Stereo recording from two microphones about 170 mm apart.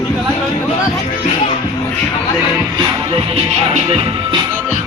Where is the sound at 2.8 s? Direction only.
30° right (ahead or behind).